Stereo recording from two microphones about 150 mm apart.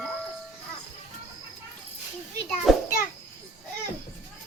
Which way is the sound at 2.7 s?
Centre (ahead or behind).